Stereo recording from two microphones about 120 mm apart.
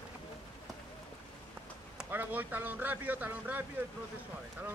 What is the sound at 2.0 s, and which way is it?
Speech, 15° right (ahead or behind).